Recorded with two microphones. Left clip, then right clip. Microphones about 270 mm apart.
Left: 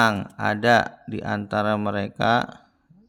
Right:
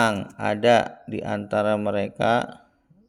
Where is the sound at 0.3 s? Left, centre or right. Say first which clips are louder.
Right 1 dB; left.